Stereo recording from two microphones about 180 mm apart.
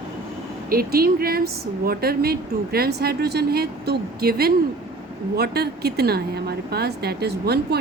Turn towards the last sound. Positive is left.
turn(degrees=-65)  # may be behind; listen again after turning